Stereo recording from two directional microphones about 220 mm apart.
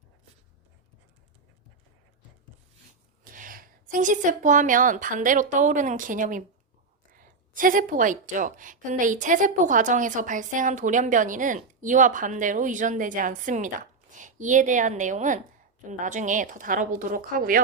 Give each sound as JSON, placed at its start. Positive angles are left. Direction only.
{"t": 3.3, "sound": "a woman's voice", "side_deg": -40}